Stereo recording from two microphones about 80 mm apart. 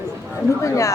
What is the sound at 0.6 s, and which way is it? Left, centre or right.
Speech, left.